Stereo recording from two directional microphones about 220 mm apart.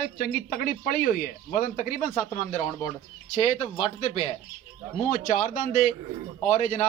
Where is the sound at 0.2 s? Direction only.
45° left (ahead or behind).